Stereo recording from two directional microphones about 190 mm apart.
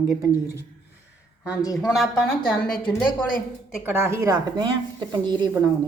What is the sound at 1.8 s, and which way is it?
A woman's voice, centre (ahead or behind).